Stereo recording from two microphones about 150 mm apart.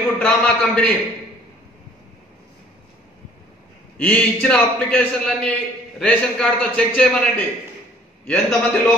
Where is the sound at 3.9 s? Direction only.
10° left (ahead or behind).